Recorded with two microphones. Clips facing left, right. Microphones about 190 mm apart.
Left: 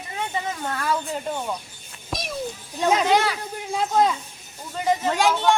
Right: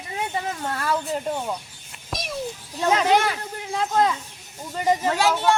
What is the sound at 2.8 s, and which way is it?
A woman's voice, 15° left (ahead or behind).